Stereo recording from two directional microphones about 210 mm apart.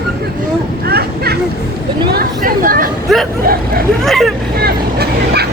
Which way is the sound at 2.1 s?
45° right (ahead or behind).